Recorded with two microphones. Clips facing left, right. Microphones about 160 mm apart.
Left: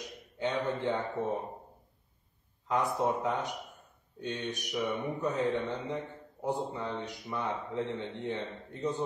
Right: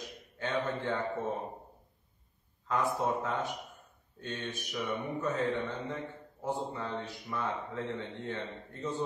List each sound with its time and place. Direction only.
0.4 s a man's voice: 20° left (ahead or behind)
2.7 s speech: 20° left (ahead or behind)